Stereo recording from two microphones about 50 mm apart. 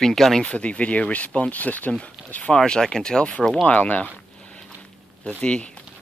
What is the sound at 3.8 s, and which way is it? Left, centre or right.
Speech, left.